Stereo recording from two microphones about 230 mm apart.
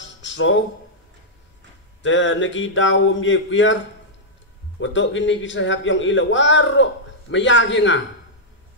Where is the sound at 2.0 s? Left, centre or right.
Left.